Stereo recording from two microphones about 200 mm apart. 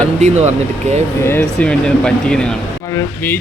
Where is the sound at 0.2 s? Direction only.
35° right (ahead or behind).